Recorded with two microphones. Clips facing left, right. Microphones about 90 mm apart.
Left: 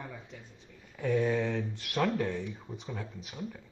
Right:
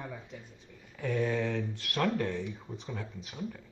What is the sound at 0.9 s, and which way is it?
Speech, 10° left (ahead or behind).